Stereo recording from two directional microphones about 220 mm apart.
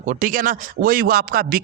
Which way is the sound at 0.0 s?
35° right (ahead or behind).